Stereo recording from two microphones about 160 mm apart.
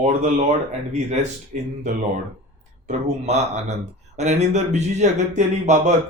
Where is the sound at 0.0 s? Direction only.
45° right (ahead or behind).